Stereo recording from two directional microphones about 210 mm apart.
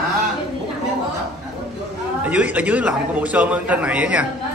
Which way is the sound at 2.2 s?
5° right (ahead or behind).